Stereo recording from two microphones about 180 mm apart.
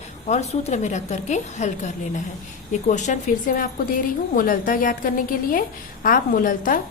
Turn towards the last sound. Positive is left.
turn(degrees=50)  # may be behind; listen again after turning